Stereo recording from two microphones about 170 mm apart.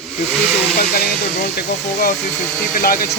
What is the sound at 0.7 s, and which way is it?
Speech, 60° left (ahead or behind).